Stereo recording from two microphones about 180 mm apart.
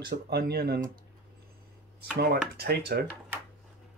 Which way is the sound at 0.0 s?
60° right (ahead or behind).